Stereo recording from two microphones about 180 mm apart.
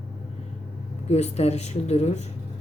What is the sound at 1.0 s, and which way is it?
Speech, 35° left (ahead or behind).